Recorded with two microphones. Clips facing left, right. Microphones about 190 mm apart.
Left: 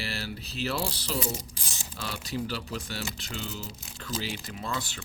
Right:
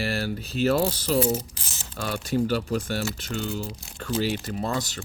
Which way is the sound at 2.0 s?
50° right (ahead or behind).